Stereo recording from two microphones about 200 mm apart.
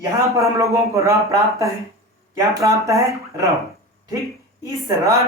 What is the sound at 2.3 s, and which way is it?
Speech, 15° right (ahead or behind).